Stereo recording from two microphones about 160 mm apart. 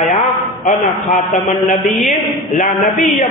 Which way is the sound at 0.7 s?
50° left (ahead or behind).